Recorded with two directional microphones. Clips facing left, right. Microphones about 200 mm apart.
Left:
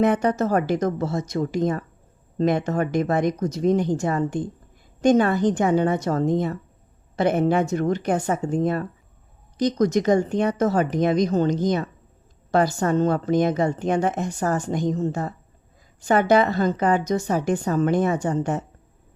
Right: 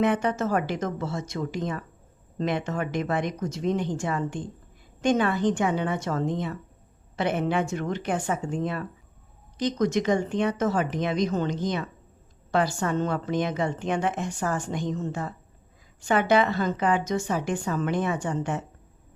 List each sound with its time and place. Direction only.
0.0 s a woman's voice: 40° left (ahead or behind)